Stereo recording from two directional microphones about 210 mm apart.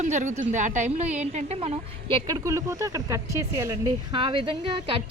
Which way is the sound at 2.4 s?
15° right (ahead or behind).